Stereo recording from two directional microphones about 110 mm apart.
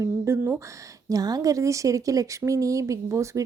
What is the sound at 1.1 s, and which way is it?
Speech, 35° right (ahead or behind).